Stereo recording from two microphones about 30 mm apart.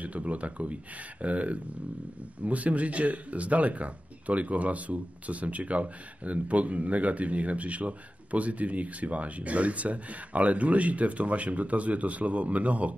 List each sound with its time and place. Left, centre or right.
0.0 s speech: right